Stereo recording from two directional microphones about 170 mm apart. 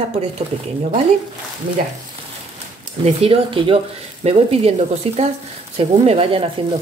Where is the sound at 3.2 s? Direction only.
35° right (ahead or behind).